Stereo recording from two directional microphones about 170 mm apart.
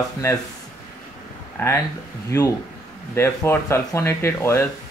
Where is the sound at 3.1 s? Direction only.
15° left (ahead or behind).